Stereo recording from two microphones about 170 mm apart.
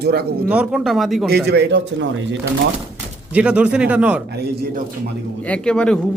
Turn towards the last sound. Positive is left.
turn(degrees=5)  # may be behind; listen again after turning